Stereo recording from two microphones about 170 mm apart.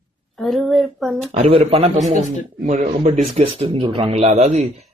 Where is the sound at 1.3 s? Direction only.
35° right (ahead or behind).